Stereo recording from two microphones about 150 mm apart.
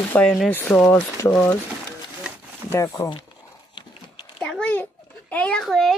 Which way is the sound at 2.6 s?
15° left (ahead or behind).